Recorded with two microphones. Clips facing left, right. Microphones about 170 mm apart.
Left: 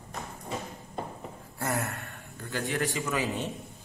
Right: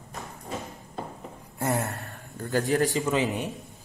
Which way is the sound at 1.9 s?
40° right (ahead or behind).